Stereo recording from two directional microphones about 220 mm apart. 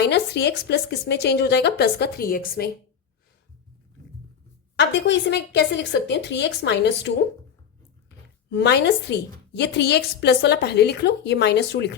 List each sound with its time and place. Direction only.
0.0 s a woman's voice: 50° left (ahead or behind)
4.9 s a woman's voice: 55° left (ahead or behind)
8.4 s a woman's voice: 50° left (ahead or behind)